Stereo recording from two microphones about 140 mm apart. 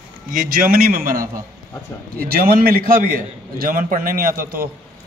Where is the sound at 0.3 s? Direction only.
75° right (ahead or behind).